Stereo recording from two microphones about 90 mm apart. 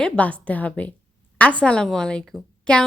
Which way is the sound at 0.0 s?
15° left (ahead or behind).